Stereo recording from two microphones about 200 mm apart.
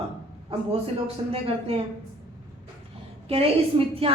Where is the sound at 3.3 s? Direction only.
30° right (ahead or behind).